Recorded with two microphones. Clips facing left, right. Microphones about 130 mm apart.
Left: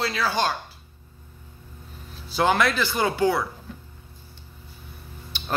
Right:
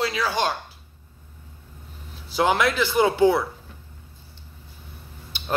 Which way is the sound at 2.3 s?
15° right (ahead or behind).